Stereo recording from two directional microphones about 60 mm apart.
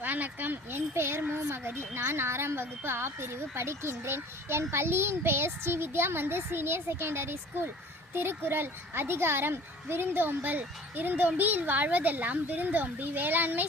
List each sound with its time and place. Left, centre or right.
0.0 s speech: right